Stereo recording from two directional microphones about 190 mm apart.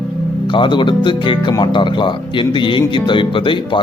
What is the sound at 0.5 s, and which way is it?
Speech, 25° left (ahead or behind).